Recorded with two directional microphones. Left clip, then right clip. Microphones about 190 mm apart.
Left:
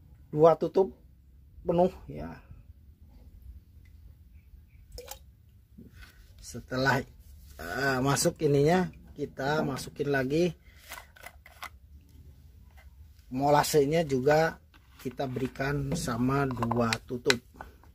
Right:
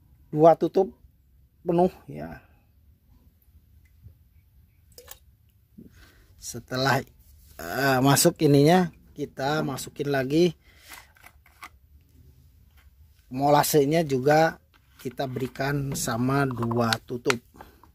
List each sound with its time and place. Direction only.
0.3 s speech: 55° right (ahead or behind)
4.9 s drip: centre (ahead or behind)
6.4 s speech: 55° right (ahead or behind)
13.3 s speech: 55° right (ahead or behind)
17.5 s a sound: 55° right (ahead or behind)